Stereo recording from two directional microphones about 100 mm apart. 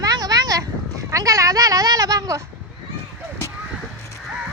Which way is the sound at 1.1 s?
35° right (ahead or behind).